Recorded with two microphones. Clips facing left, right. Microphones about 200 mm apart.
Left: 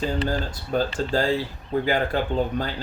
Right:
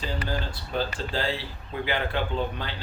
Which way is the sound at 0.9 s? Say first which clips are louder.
Left 7 dB; 45° left (ahead or behind).